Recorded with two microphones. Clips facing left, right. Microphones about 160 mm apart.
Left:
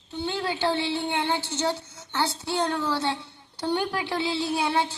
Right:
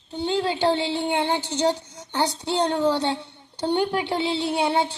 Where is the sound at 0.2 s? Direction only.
20° right (ahead or behind).